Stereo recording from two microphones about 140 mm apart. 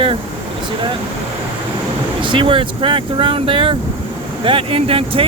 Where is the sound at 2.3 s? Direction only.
35° right (ahead or behind).